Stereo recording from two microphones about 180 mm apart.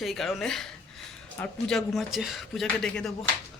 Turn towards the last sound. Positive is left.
turn(degrees=5)  # may be behind; listen again after turning